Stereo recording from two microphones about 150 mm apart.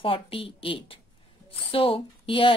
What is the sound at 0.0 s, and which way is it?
A woman's voice, 40° left (ahead or behind).